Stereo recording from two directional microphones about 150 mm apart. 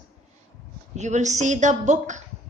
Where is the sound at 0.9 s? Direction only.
50° right (ahead or behind).